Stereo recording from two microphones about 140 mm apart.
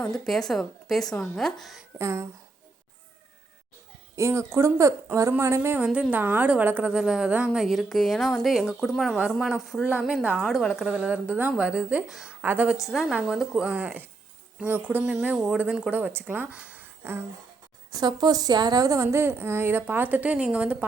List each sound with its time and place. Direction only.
0.0 s a woman's voice: 5° left (ahead or behind)
2.0 s speech: 20° right (ahead or behind)
4.1 s a woman's voice: 20° right (ahead or behind)
17.9 s speech: 30° right (ahead or behind); by 20.7 s 10° right (ahead or behind)